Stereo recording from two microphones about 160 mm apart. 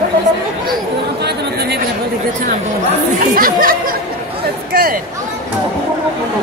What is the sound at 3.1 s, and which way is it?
Speech, 60° right (ahead or behind).